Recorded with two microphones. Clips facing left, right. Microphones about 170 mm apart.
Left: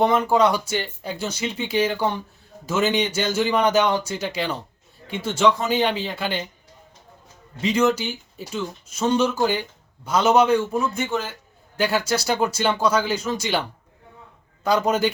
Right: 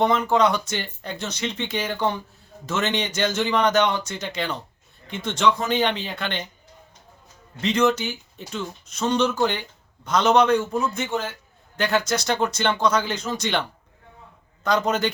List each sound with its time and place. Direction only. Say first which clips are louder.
0.0 s speech: left 1 dB; 10° left (ahead or behind)
7.6 s speech: left 1 dB; 10° left (ahead or behind)